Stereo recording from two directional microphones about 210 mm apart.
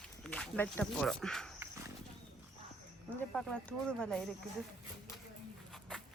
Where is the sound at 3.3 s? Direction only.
5° left (ahead or behind).